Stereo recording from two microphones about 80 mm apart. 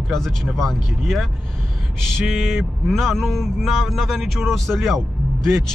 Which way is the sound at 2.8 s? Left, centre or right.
Centre.